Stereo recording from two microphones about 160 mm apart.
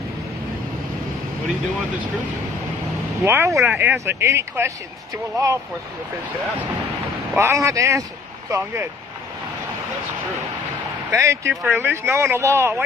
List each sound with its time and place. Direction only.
3.3 s speech: 15° right (ahead or behind)
7.3 s speech: 20° right (ahead or behind)
11.1 s speech: 20° right (ahead or behind)